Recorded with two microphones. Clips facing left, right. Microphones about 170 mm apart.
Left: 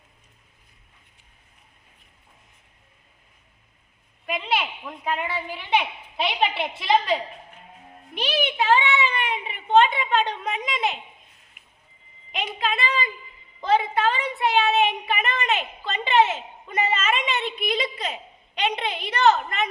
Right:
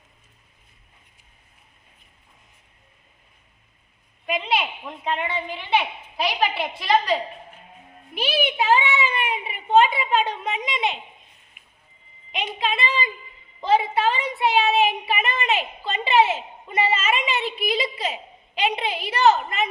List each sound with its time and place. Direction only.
4.3 s a woman's voice: centre (ahead or behind)
6.1 s a woman's voice: 25° left (ahead or behind)
6.8 s a woman's voice: centre (ahead or behind)
8.1 s a child's voice: 10° right (ahead or behind)
12.8 s a woman's voice: centre (ahead or behind)